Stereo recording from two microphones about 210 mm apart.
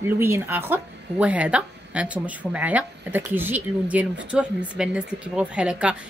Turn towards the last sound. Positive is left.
turn(degrees=-5)  # may be behind; listen again after turning